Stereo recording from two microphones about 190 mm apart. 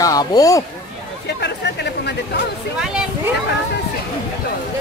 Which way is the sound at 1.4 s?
60° left (ahead or behind).